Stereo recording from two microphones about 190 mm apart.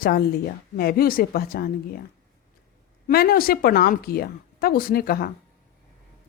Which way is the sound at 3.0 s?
50° left (ahead or behind).